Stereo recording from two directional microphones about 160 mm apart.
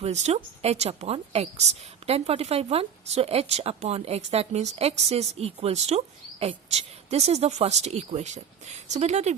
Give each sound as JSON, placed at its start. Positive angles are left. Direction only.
{"t": 0.0, "sound": "a woman's voice", "side_deg": -45}